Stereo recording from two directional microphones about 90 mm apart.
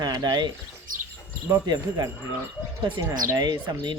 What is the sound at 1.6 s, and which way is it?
Speech, 40° right (ahead or behind).